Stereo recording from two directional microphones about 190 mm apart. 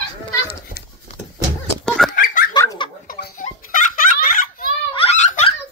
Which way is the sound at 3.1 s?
50° left (ahead or behind).